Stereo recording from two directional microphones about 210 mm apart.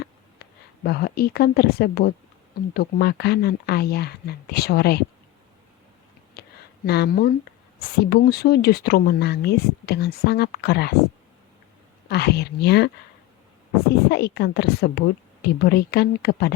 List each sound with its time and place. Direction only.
0.4 s a sound: 50° left (ahead or behind)
0.9 s speech: 50° left (ahead or behind)
6.4 s a sound: 50° left (ahead or behind)
6.8 s speech: 50° left (ahead or behind)
12.0 s speech: 50° left (ahead or behind)
14.1 s speech: 50° left (ahead or behind)